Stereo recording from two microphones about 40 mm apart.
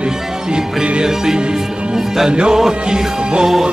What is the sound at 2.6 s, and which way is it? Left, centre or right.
Music, centre.